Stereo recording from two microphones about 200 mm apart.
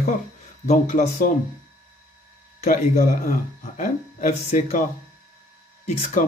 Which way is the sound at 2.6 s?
40° left (ahead or behind).